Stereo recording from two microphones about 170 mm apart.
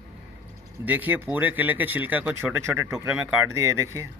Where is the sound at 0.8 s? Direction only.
10° right (ahead or behind).